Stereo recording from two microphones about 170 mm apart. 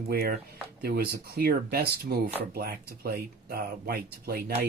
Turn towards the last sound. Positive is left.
turn(degrees=-65)  # may be behind; listen again after turning